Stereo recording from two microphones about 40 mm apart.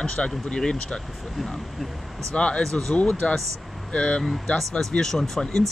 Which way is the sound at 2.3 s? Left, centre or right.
Left.